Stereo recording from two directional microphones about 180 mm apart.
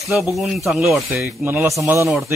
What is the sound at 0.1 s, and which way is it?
Speech, 10° right (ahead or behind).